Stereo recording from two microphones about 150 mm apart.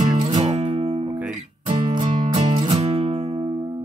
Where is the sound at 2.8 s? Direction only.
40° right (ahead or behind).